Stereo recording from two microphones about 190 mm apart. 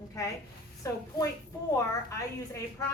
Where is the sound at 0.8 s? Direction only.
15° left (ahead or behind).